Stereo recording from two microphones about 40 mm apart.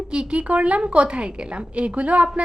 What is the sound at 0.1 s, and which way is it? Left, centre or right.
A woman's voice, right.